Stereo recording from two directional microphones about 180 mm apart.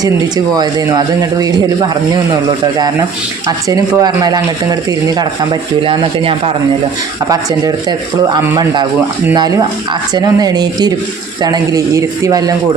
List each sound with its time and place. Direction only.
0.5 s speech: 20° right (ahead or behind)
3.7 s speech: 20° right (ahead or behind)
5.8 s speech: 30° right (ahead or behind)